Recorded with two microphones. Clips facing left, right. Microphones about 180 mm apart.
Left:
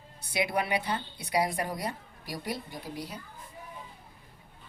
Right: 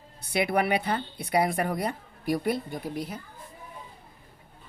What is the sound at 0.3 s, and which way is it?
Speech, 60° right (ahead or behind).